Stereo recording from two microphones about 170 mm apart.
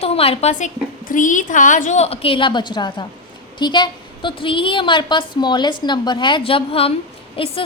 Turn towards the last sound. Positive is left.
turn(degrees=30)  # may be behind; listen again after turning